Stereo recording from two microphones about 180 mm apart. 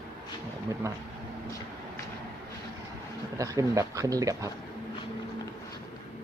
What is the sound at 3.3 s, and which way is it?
Speech, 20° right (ahead or behind).